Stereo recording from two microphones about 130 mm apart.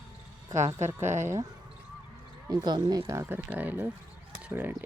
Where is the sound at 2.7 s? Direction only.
35° right (ahead or behind).